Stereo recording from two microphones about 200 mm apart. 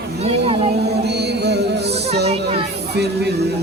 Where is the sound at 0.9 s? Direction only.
55° right (ahead or behind).